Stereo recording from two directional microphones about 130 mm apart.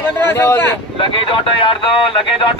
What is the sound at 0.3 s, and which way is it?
Speech, 20° left (ahead or behind).